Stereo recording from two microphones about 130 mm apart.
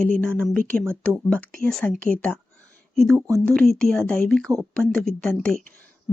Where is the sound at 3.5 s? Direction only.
5° left (ahead or behind).